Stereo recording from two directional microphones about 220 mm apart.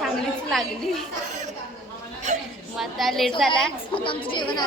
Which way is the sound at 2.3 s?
30° right (ahead or behind).